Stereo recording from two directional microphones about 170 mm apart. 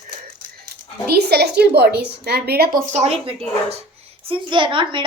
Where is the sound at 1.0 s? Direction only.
70° right (ahead or behind).